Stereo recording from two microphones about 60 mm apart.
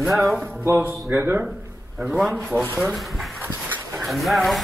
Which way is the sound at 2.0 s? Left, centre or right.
Centre.